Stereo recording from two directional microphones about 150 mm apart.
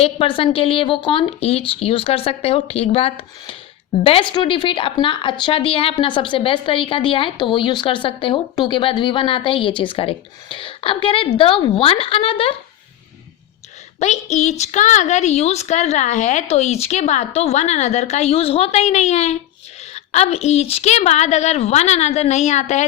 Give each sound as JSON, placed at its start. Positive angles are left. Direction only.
{"t": 0.0, "sound": "a woman's voice", "side_deg": 35}
{"t": 14.0, "sound": "a woman's voice", "side_deg": 50}